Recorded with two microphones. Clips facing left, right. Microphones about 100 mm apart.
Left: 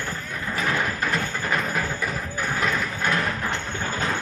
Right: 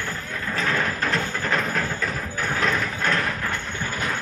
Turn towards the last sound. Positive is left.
turn(degrees=25)  # may be behind; listen again after turning